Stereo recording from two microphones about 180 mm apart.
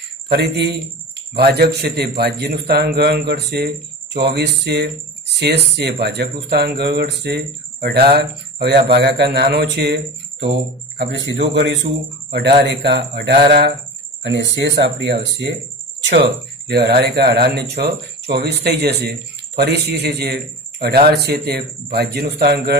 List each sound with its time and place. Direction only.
0.3 s speech: 70° right (ahead or behind)
11.0 s a man's voice: 90° right
11.5 s speech: 75° right (ahead or behind)
12.3 s speech: 65° right (ahead or behind)
14.2 s speech: 90° right; by 22.8 s 65° right (ahead or behind)